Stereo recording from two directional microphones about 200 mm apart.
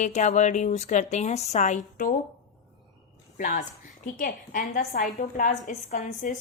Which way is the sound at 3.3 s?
40° left (ahead or behind).